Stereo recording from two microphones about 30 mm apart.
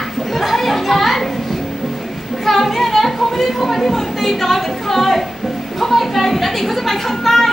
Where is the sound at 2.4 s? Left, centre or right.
Centre.